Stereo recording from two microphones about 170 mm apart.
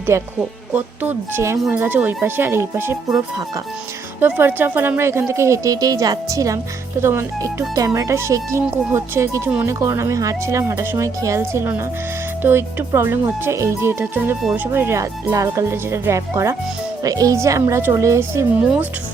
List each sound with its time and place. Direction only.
0.1 s a woman's voice: 15° right (ahead or behind)
4.2 s a woman's voice: 15° right (ahead or behind)